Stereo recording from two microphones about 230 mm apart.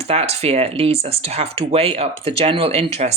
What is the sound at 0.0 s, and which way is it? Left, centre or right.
Speech, right.